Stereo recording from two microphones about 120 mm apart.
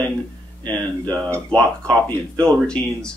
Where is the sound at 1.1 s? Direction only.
10° left (ahead or behind).